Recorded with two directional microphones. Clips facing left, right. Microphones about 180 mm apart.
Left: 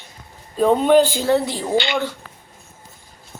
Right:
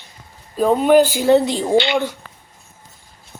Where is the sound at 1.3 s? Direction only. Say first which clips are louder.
Right 7 dB; 20° right (ahead or behind).